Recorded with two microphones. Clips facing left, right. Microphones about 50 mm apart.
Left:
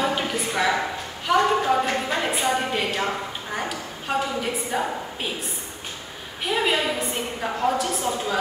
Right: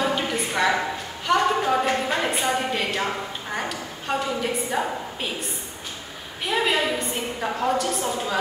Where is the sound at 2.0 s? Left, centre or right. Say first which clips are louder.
Even; centre.